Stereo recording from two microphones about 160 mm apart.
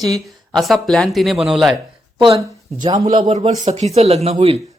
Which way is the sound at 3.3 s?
40° right (ahead or behind).